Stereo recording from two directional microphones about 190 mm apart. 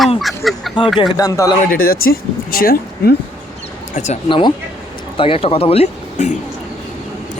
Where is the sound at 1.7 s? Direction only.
50° left (ahead or behind).